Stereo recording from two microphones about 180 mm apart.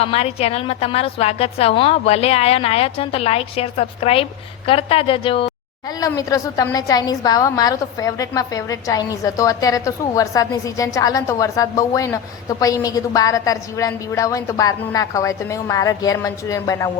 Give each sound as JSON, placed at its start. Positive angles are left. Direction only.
{"t": 0.0, "sound": "a woman's voice", "side_deg": 35}
{"t": 6.0, "sound": "a woman's voice", "side_deg": 20}